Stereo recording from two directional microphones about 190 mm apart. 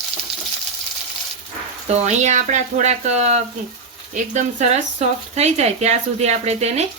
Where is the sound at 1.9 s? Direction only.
40° right (ahead or behind).